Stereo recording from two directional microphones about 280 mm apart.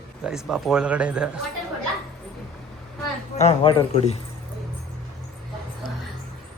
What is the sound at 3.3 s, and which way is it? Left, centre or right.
Speech, left.